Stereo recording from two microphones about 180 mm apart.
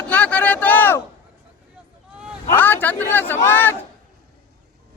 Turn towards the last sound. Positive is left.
turn(degrees=10)  # may be behind; listen again after turning